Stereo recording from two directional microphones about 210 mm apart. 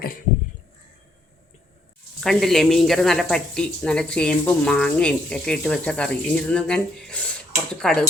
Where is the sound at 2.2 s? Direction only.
Centre (ahead or behind).